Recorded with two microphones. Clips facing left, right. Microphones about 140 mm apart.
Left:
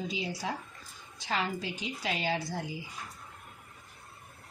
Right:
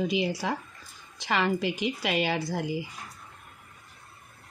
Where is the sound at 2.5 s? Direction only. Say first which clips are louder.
Right 6 dB; 90° right.